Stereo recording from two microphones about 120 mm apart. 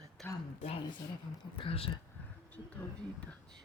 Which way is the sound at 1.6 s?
50° left (ahead or behind).